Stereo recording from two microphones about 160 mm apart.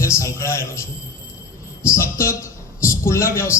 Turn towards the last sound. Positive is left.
turn(degrees=15)  # may be behind; listen again after turning